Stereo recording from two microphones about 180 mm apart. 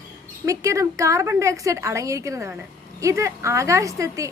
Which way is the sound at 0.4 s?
15° right (ahead or behind).